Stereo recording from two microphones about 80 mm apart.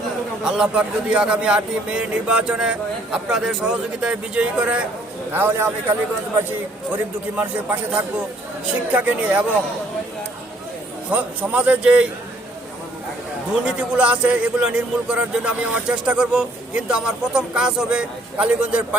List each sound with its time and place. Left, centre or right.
0.4 s a man's voice: centre
5.3 s a man's voice: right
6.9 s a man's voice: centre
11.1 s a man's voice: centre
13.7 s a man's voice: centre